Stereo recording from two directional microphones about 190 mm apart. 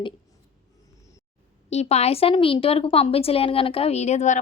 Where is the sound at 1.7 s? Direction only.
35° left (ahead or behind).